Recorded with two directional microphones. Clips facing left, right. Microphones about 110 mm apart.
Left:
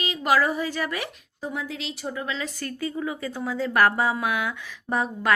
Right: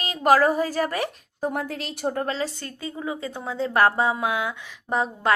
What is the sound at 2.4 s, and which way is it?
A woman's voice, 25° right (ahead or behind).